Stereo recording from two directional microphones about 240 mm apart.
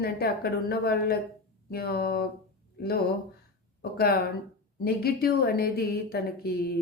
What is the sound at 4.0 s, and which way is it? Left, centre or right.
Speech, left.